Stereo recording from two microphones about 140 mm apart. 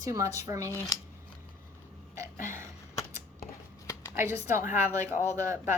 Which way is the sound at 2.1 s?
20° right (ahead or behind).